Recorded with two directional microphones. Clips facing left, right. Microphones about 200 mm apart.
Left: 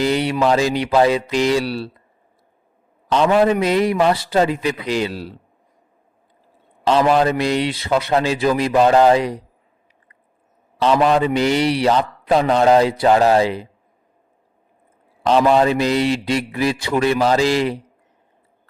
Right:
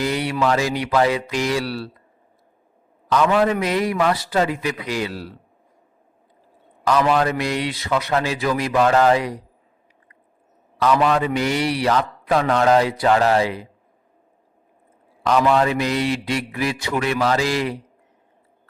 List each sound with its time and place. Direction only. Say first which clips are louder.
0.0 s a man's voice: left 4 dB; 25° left (ahead or behind)
3.1 s a man's voice: left 3 dB; 25° left (ahead or behind)
6.8 s a man's voice: left 3 dB; 25° left (ahead or behind)
10.8 s a man's voice: left 3 dB; 30° left (ahead or behind)
15.3 s a man's voice: left 3 dB; 30° left (ahead or behind)